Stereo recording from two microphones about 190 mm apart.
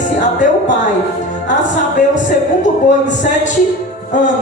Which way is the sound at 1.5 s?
40° left (ahead or behind).